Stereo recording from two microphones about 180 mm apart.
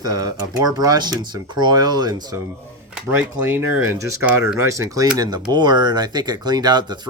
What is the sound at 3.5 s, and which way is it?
Speech, 15° right (ahead or behind).